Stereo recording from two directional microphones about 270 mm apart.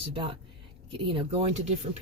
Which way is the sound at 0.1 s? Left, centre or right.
Centre.